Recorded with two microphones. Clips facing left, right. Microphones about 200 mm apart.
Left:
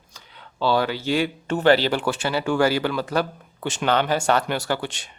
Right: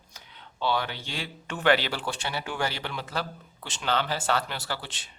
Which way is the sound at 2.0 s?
90° left.